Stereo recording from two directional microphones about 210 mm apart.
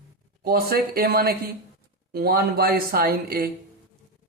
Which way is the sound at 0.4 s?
45° right (ahead or behind).